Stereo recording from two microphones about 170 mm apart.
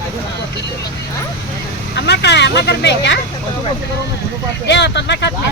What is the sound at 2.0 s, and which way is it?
Vehicle, 80° left.